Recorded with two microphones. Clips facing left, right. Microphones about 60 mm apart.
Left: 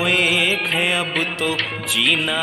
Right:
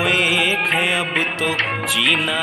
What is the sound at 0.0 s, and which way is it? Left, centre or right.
Music, centre.